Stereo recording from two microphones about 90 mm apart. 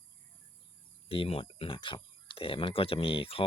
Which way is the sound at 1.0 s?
90° left.